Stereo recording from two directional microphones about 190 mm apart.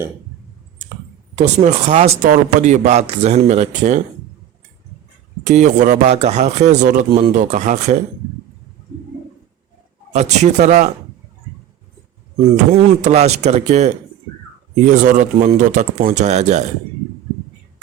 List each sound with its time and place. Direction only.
1.4 s speech: 35° right (ahead or behind)
5.5 s speech: 40° right (ahead or behind)
10.1 s speech: 35° right (ahead or behind)
12.7 s speech: 35° right (ahead or behind)